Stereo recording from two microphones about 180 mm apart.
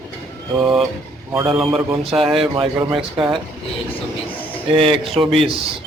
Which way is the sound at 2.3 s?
30° right (ahead or behind).